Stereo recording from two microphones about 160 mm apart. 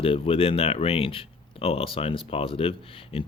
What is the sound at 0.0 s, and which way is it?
Speech, 35° left (ahead or behind).